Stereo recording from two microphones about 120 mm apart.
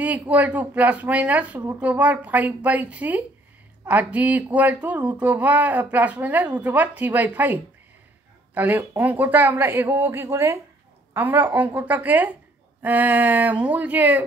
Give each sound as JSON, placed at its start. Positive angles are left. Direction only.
{"t": 0.0, "sound": "speech", "side_deg": -10}